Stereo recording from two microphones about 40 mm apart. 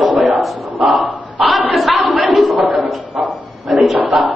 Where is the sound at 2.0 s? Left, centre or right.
Right.